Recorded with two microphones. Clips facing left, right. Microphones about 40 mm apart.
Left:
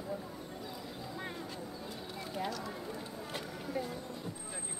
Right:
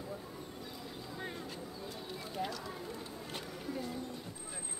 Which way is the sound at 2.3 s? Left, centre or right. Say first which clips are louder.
Left 2 dB; centre.